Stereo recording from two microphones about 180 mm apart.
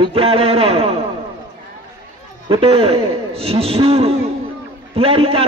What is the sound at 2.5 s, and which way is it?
A man's voice, 30° right (ahead or behind).